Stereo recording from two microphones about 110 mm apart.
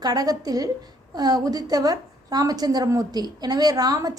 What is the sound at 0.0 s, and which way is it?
A woman's voice, 35° right (ahead or behind).